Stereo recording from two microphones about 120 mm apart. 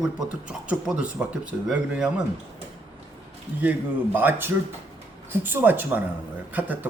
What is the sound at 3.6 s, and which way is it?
Speech, 15° right (ahead or behind).